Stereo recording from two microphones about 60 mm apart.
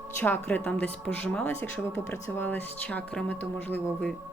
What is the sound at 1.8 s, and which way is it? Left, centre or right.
Speech, left.